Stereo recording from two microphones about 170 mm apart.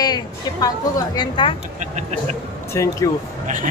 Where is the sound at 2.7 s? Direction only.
15° left (ahead or behind).